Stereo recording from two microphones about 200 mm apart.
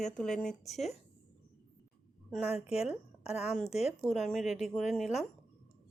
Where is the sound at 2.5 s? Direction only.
30° left (ahead or behind).